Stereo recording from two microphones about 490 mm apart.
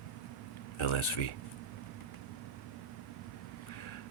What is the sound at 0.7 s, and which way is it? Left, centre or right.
Speech, left.